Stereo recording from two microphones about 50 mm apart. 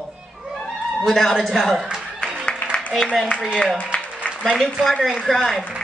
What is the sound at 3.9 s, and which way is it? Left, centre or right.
Music, left.